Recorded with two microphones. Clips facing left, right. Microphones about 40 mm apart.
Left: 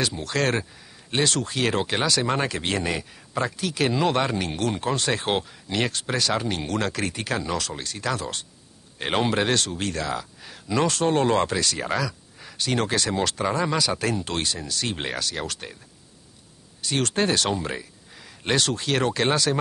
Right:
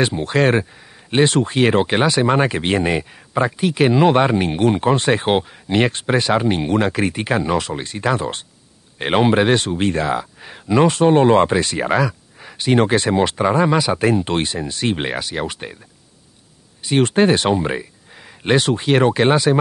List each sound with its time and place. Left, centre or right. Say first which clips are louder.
0.0 s speech: right 8 dB; right
16.8 s speech: right 9 dB; right